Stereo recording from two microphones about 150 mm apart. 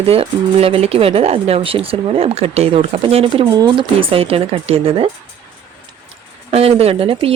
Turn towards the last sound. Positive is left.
turn(degrees=-40)  # may be behind; listen again after turning